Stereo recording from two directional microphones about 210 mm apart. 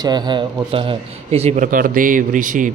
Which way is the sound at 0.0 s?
20° right (ahead or behind).